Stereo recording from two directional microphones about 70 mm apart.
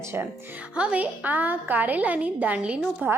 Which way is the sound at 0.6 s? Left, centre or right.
Centre.